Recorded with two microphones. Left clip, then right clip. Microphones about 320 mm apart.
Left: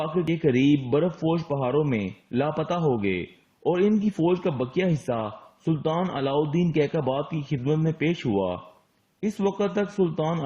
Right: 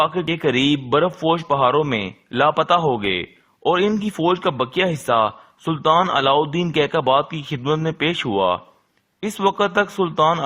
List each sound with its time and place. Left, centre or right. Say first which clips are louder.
0.0 s a man's voice: right 6 dB; right